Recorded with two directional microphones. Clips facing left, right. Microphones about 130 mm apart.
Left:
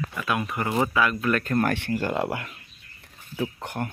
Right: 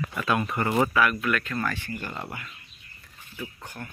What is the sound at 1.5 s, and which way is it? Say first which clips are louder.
Speech: left 7 dB; 60° left (ahead or behind).